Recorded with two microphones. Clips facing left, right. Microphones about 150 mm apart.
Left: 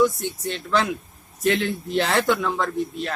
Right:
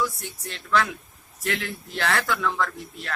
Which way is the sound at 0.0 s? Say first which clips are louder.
Left 9 dB; 20° left (ahead or behind).